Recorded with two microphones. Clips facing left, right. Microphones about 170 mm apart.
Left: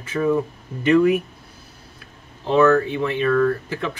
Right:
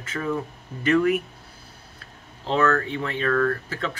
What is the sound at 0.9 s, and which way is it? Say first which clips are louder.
Speech: left 4 dB; 15° left (ahead or behind).